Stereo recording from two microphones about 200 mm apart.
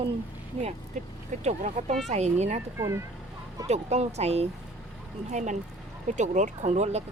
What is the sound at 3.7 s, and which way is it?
Speech, 35° right (ahead or behind).